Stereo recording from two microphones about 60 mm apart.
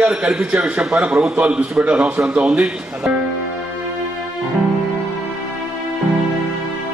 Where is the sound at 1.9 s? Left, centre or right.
Centre.